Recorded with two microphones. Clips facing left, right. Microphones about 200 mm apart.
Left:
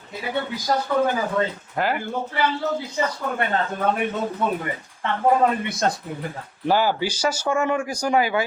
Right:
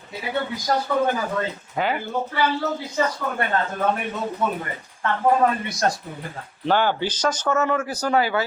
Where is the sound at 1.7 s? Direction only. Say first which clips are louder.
Right 1 dB; centre (ahead or behind).